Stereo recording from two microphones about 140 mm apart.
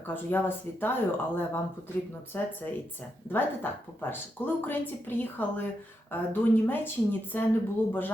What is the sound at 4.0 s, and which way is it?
A woman's voice, 15° left (ahead or behind).